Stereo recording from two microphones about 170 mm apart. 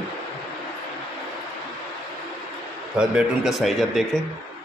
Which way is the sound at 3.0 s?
Centre (ahead or behind).